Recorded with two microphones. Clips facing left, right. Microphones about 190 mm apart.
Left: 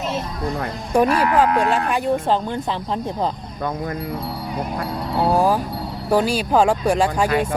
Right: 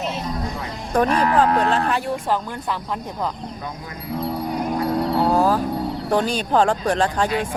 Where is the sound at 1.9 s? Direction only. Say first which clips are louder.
Left 3 dB; 20° left (ahead or behind).